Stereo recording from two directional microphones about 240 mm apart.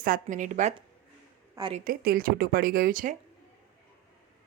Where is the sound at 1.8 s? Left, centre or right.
Right.